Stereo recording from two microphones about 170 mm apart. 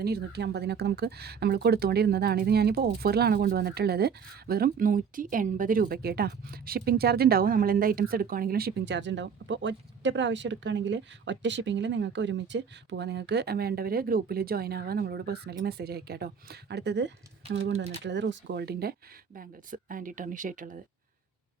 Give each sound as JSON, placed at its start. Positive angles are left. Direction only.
{"t": 0.0, "sound": "speech", "side_deg": -70}